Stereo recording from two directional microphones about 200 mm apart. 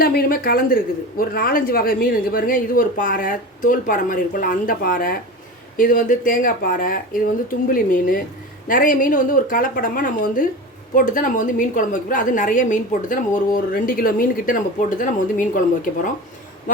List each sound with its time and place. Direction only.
0.0 s a woman's voice: 50° left (ahead or behind)